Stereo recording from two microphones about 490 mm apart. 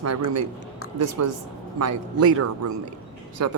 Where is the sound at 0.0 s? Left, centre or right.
Right.